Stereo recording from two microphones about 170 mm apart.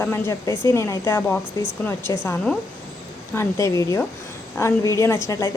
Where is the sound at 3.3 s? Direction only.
15° left (ahead or behind).